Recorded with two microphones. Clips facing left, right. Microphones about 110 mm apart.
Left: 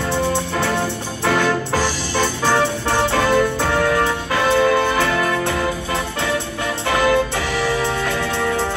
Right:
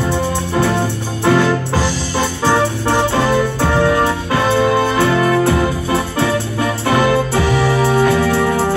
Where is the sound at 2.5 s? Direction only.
20° right (ahead or behind).